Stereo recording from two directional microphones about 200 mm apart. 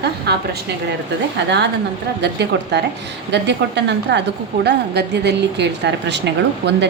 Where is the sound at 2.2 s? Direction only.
55° right (ahead or behind).